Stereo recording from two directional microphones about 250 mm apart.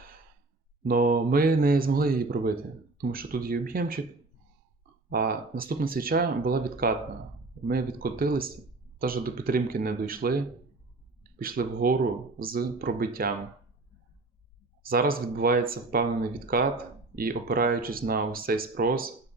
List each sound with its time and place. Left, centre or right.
0.9 s speech: right
5.0 s speech: right
14.8 s speech: right